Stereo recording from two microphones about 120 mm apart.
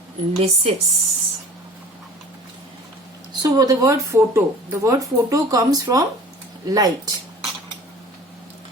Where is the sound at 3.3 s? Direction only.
35° right (ahead or behind).